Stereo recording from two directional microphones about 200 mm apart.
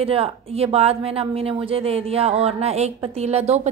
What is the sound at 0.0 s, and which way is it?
A woman's voice, 30° right (ahead or behind).